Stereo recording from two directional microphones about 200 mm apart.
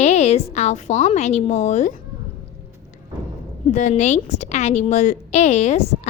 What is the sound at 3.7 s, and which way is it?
A woman's voice, 35° left (ahead or behind).